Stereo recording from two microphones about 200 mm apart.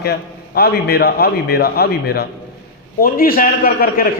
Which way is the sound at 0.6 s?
50° left (ahead or behind).